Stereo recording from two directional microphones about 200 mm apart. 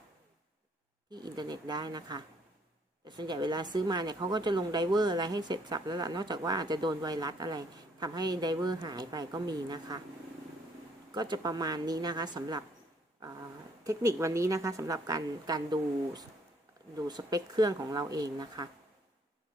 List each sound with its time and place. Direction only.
1.1 s a woman's voice: 20° right (ahead or behind)
11.1 s a woman's voice: 20° right (ahead or behind)